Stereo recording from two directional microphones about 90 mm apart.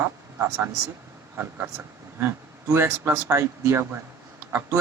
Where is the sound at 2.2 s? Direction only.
30° right (ahead or behind).